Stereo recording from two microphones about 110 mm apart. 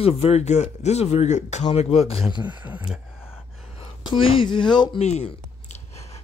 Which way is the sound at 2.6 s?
15° right (ahead or behind).